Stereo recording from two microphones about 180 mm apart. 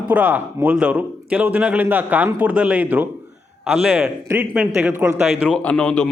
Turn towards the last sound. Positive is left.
turn(degrees=5)  # may be behind; listen again after turning